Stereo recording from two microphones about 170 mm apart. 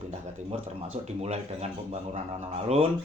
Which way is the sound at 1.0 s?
40° right (ahead or behind).